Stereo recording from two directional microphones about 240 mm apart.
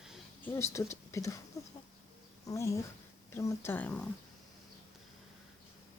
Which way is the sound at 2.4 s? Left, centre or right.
Centre.